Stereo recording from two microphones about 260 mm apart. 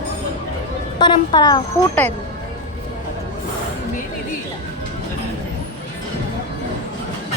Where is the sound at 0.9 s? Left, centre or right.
Centre.